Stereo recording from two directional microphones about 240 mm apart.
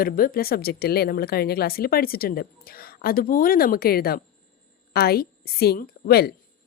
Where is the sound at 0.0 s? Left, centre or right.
Left.